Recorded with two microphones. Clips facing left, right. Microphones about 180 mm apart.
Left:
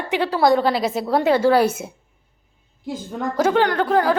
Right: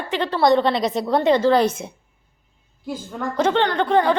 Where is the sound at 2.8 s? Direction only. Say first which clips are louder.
Left 1 dB; 20° left (ahead or behind).